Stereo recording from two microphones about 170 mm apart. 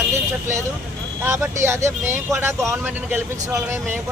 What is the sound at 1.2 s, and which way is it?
Speech, 15° right (ahead or behind).